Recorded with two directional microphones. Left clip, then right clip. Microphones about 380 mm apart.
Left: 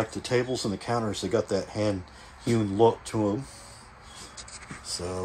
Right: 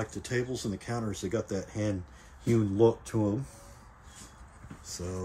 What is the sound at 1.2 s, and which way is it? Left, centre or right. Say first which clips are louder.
Speech: left 7 dB; left.